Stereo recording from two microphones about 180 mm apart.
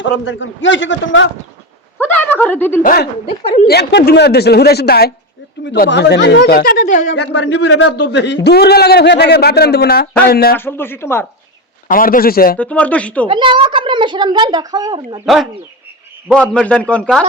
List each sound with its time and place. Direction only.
0.0 s a man's voice: 90° left
2.0 s a woman's voice: 10° left (ahead or behind)
2.8 s a man's voice: 55° left (ahead or behind)
3.2 s a woman's voice: 35° left (ahead or behind)
3.7 s a man's voice: 65° left (ahead or behind); by 7.1 s 45° left (ahead or behind)
7.1 s a man's voice: 70° left (ahead or behind)
8.4 s a man's voice: 65° left (ahead or behind)
10.6 s speech: 10° left (ahead or behind)
11.9 s a man's voice: 50° left (ahead or behind)
12.5 s speech: 10° left (ahead or behind)
13.2 s speech: 25° right (ahead or behind)
16.3 s a man's voice: 5° left (ahead or behind)